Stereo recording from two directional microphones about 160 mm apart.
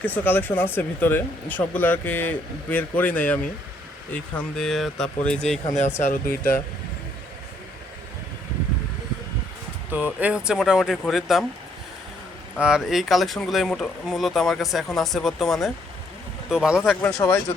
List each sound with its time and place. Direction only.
0.0 s speech: 10° left (ahead or behind)
6.0 s speech: 60° left (ahead or behind)
9.9 s speech: 10° right (ahead or behind)
12.5 s speech: 5° right (ahead or behind)
16.9 s speech: 5° left (ahead or behind)